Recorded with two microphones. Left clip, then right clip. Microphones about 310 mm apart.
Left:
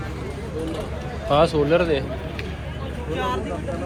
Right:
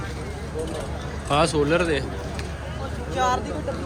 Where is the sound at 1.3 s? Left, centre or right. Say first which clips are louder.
Left 3 dB; centre.